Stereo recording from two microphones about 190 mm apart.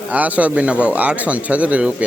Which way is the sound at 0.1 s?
10° right (ahead or behind).